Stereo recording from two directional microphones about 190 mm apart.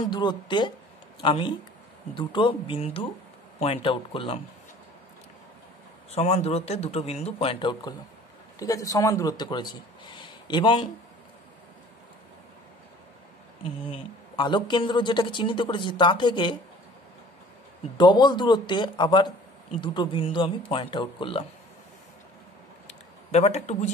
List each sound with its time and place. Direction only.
0.0 s speech: 25° left (ahead or behind)
6.1 s a man's voice: 35° left (ahead or behind)
8.5 s a man's voice: 15° left (ahead or behind)
13.8 s speech: 25° left (ahead or behind)
17.9 s speech: 25° left (ahead or behind)
23.3 s a man's voice: 35° left (ahead or behind)